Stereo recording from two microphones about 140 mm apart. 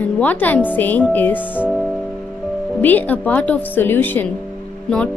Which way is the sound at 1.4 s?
10° right (ahead or behind).